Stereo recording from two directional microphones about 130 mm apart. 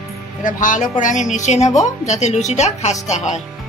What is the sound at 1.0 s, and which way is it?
A woman's voice, 70° left (ahead or behind).